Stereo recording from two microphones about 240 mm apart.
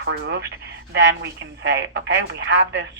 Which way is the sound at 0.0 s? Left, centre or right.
Right.